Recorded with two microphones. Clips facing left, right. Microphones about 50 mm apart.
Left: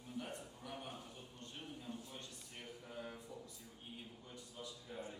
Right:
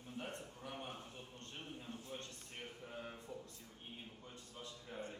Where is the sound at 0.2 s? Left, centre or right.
Right.